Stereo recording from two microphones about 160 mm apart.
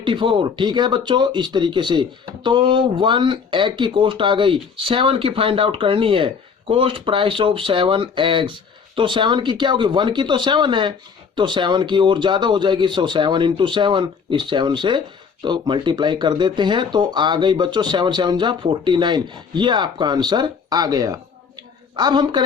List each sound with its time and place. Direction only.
0.0 s speech: 30° right (ahead or behind)